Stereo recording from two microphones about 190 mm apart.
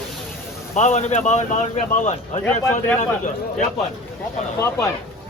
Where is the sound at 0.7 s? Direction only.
40° left (ahead or behind).